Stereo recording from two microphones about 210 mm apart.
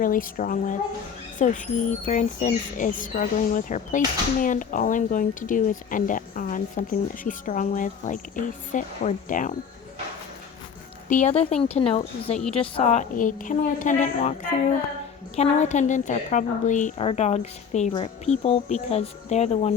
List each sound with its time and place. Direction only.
0.0 s speech: 40° left (ahead or behind)
11.1 s a woman's voice: 35° left (ahead or behind)